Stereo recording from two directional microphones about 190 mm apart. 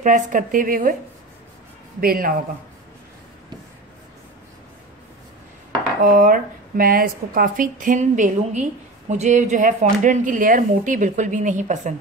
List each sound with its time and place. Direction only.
0.0 s speech: 45° right (ahead or behind)
2.0 s speech: 50° right (ahead or behind)
6.0 s speech: 45° right (ahead or behind)